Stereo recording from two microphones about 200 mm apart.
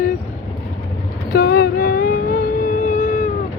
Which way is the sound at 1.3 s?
50° left (ahead or behind).